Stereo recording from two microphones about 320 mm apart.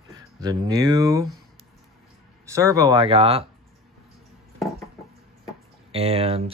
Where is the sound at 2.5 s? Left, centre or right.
Centre.